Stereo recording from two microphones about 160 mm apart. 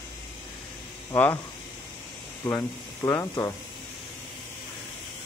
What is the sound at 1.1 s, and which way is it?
Speech, 15° left (ahead or behind).